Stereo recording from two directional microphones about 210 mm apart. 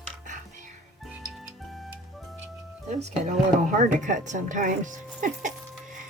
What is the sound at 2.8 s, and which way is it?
A woman's voice, 30° right (ahead or behind).